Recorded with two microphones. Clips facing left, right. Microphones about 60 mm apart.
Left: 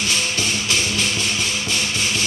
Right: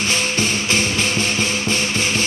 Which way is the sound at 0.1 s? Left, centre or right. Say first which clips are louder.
Right 3 dB; right.